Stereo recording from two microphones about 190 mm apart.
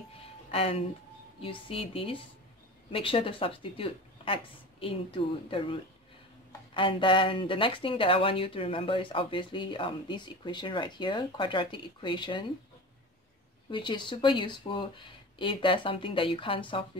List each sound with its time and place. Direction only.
0.5 s speech: 30° left (ahead or behind)
13.7 s speech: 25° left (ahead or behind)